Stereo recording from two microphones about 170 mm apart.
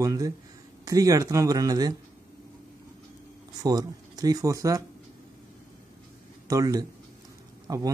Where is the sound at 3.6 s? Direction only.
20° right (ahead or behind).